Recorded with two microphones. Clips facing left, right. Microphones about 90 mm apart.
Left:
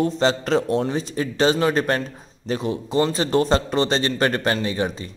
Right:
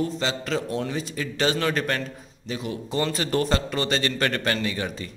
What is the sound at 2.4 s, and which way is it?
Speech, 45° left (ahead or behind).